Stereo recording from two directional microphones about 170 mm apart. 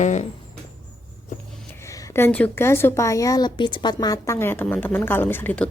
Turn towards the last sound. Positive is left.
turn(degrees=10)  # may be behind; listen again after turning